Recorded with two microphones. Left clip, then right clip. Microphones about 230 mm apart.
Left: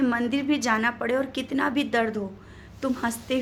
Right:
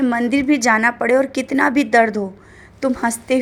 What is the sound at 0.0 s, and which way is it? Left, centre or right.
A woman's voice, right.